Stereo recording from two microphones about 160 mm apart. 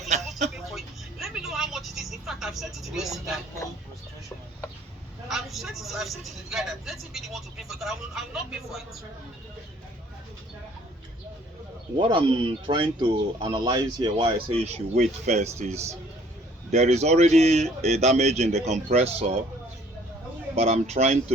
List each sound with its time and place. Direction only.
0.1 s a sound: 45° right (ahead or behind)
1.2 s vehicle: 5° right (ahead or behind)
5.3 s speech: centre (ahead or behind)
11.9 s speech: 30° right (ahead or behind)
20.6 s speech: 40° right (ahead or behind)